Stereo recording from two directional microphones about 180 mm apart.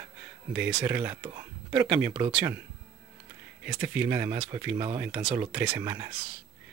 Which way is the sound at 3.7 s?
10° right (ahead or behind).